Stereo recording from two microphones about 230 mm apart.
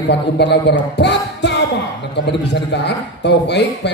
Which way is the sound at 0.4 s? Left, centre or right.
Left.